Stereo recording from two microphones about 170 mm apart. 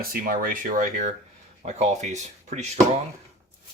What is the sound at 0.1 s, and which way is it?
Speech, 55° right (ahead or behind).